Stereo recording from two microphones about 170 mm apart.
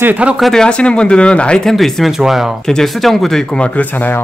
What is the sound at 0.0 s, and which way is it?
Speech, 10° right (ahead or behind).